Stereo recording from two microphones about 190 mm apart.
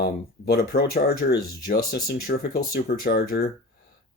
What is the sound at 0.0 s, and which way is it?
Speech, 60° left (ahead or behind).